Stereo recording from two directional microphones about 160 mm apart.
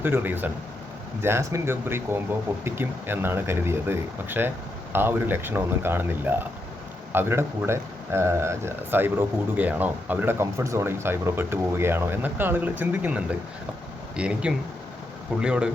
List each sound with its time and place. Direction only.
0.0 s speech: 15° right (ahead or behind)